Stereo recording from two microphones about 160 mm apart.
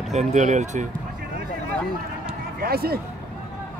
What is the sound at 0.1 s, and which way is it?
Speech, 45° right (ahead or behind).